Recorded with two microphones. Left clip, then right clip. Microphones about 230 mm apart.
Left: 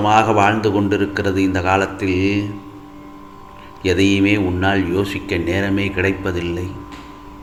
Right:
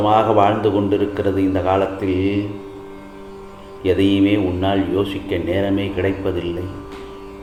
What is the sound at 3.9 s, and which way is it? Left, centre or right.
A man's voice, left.